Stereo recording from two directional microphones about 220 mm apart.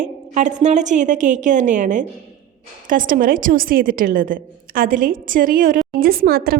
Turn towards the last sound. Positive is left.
turn(degrees=-45)  # may be behind; listen again after turning